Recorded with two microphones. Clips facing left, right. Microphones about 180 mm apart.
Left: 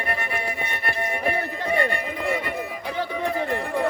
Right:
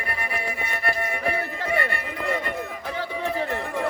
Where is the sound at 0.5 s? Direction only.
25° left (ahead or behind).